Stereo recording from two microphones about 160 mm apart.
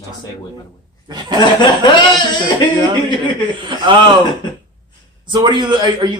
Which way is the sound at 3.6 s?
30° right (ahead or behind).